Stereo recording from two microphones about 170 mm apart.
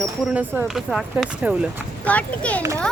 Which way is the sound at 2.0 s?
10° left (ahead or behind).